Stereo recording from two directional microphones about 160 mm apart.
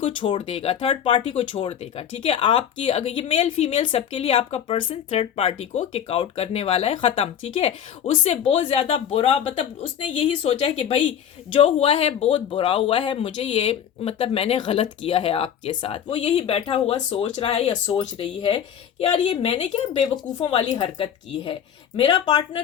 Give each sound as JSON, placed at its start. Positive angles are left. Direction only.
{"t": 0.0, "sound": "speech", "side_deg": 30}
{"t": 20.1, "sound": "speech", "side_deg": 30}